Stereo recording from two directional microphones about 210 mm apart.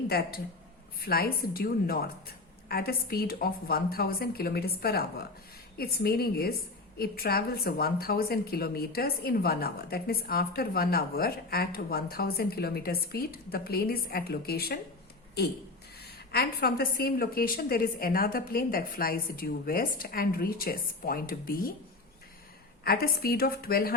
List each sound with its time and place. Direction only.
0.1 s a woman's voice: 45° left (ahead or behind)
22.8 s a woman's voice: 45° left (ahead or behind)